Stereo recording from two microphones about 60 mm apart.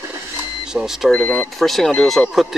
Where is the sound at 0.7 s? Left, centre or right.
Centre.